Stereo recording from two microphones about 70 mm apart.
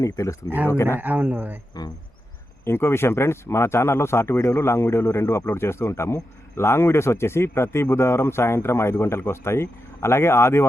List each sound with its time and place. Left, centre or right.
0.0 s speech: left
0.9 s a man's voice: right
1.7 s speech: left
2.6 s speech: left